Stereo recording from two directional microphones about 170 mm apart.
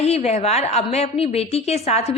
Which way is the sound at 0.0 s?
40° left (ahead or behind).